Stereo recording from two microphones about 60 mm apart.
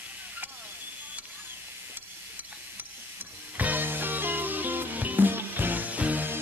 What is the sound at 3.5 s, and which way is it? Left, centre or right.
Music, right.